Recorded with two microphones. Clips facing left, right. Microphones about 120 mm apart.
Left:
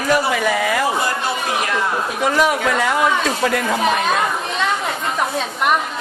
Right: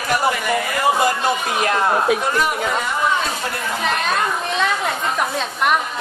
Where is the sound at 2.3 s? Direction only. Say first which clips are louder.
Left 3 dB; 90° left.